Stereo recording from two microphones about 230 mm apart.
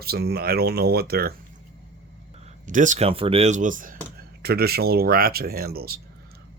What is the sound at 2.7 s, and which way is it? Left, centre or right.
Speech, right.